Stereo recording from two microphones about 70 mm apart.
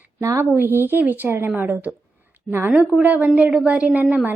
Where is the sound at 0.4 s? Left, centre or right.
Right.